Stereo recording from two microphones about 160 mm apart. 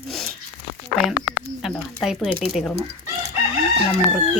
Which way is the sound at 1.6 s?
Centre (ahead or behind).